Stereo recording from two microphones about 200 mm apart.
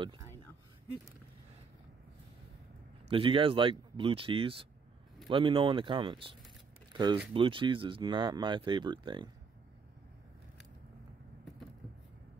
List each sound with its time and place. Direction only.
3.1 s speech: 25° right (ahead or behind)
6.9 s a sound: 20° right (ahead or behind)
7.3 s speech: 25° right (ahead or behind)